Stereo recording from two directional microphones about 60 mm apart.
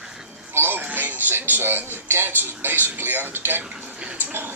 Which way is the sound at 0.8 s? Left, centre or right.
Right.